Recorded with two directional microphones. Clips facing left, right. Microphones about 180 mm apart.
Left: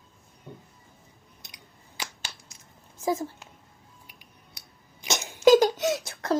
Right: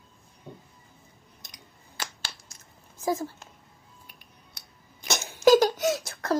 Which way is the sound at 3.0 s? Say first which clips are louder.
Left 1 dB; 20° left (ahead or behind).